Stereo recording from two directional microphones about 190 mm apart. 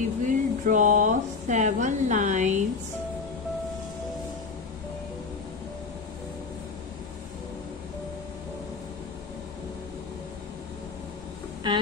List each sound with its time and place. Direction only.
0.2 s speech: 40° right (ahead or behind)
11.6 s a woman's voice: 25° right (ahead or behind)